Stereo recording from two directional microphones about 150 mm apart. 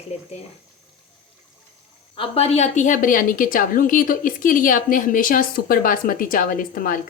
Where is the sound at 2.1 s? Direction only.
40° left (ahead or behind).